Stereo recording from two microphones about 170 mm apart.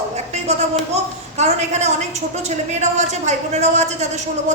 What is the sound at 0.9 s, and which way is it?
A woman's voice, 40° right (ahead or behind).